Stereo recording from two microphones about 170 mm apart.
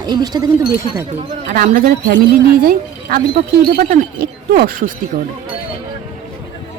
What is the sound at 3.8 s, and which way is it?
Speech, 60° right (ahead or behind).